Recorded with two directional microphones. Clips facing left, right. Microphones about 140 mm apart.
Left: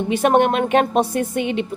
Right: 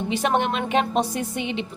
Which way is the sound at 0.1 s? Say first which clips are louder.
Left 7 dB; 55° left (ahead or behind).